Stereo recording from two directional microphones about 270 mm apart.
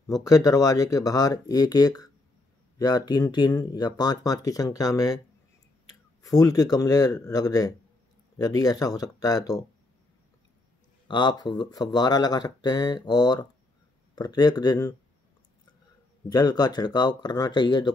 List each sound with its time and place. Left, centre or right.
0.2 s speech: centre
6.2 s speech: centre
11.1 s speech: centre
16.3 s speech: centre